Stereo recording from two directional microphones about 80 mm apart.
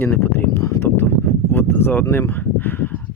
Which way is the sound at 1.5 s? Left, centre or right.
Left.